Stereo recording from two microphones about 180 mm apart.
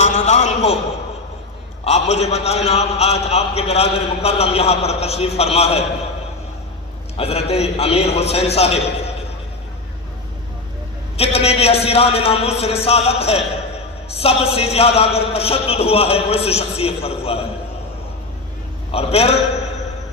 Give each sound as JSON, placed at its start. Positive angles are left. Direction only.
{"t": 0.0, "sound": "a sound", "side_deg": 40}
{"t": 1.8, "sound": "a man's voice", "side_deg": 35}
{"t": 7.2, "sound": "a man's voice", "side_deg": 35}
{"t": 11.2, "sound": "a man's voice", "side_deg": 35}
{"t": 18.9, "sound": "a man's voice", "side_deg": 35}